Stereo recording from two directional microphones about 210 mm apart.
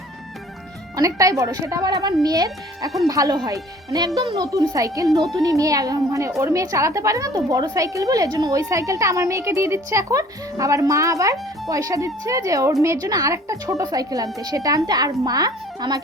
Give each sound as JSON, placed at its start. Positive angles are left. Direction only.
{"t": 0.9, "sound": "a woman's voice", "side_deg": -15}